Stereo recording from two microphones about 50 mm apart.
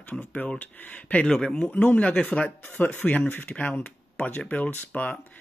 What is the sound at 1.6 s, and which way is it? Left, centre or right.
Speech, left.